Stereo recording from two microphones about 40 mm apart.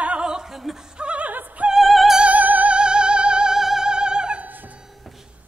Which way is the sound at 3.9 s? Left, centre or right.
Right.